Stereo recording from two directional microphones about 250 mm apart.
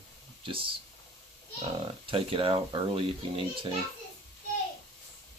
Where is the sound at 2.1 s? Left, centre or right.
Right.